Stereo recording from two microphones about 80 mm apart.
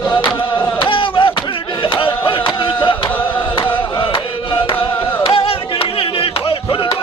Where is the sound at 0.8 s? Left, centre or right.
Left.